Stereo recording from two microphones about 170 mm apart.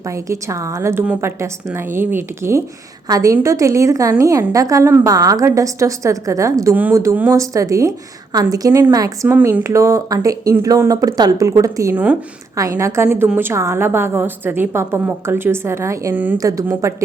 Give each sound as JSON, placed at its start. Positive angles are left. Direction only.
{"t": 0.1, "sound": "a woman's voice", "side_deg": -20}